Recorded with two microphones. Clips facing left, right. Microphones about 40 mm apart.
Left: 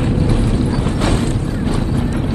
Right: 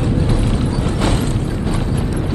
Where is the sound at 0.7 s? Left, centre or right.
Left.